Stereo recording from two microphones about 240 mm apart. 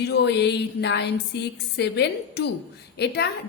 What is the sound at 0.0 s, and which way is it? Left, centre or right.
A woman's voice, left.